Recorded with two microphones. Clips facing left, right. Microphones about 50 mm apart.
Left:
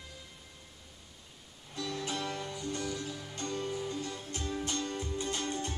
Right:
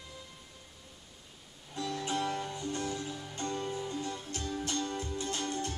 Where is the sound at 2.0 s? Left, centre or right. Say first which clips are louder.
Right 5 dB; centre.